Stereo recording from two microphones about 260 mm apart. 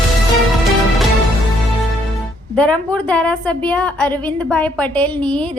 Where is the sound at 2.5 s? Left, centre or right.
Centre.